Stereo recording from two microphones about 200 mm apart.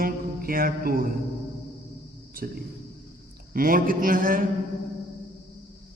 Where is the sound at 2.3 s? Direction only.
45° right (ahead or behind).